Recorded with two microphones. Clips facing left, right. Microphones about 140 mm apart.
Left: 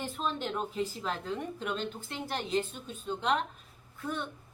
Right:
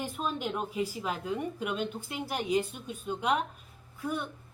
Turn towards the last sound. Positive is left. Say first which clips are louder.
# right 2 dB
turn(degrees=-10)  # may be behind; listen again after turning